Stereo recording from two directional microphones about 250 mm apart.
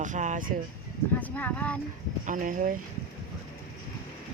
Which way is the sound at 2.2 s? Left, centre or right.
Right.